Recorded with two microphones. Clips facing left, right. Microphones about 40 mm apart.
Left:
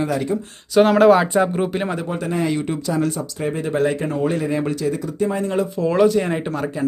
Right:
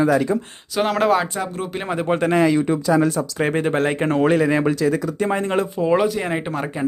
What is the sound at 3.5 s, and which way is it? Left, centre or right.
Speech, right.